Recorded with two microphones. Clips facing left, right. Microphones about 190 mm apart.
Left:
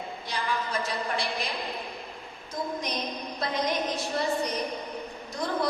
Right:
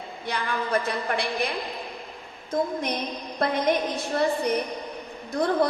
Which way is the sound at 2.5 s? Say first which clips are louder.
Right 6 dB; 55° right (ahead or behind).